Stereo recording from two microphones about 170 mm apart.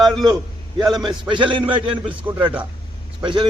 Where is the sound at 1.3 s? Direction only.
30° right (ahead or behind).